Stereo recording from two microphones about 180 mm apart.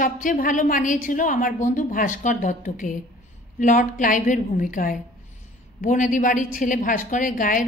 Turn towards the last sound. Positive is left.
turn(degrees=50)  # may be behind; listen again after turning